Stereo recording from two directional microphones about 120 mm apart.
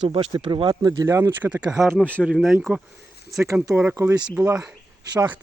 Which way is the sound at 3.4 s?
25° right (ahead or behind).